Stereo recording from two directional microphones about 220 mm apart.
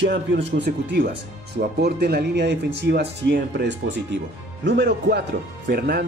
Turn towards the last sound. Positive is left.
turn(degrees=-45)  # may be behind; listen again after turning